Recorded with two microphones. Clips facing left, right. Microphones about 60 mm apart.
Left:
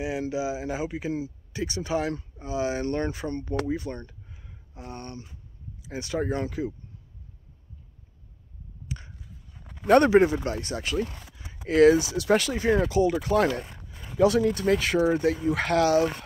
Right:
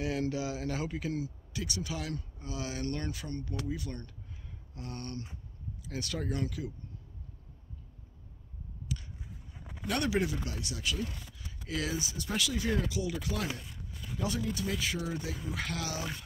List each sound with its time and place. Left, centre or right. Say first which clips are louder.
0.0 s speech: left 4 dB; centre; by 6.7 s left
8.8 s a sound: left 1 dB; left
9.5 s a sound: even; centre
9.8 s speech: left 14 dB; left
11.3 s zipper: left 9 dB; left
11.9 s speech: left 15 dB; left
12.4 s speech: left 8 dB; left
14.1 s speech: left 14 dB; left
14.5 s speech: left 11 dB; left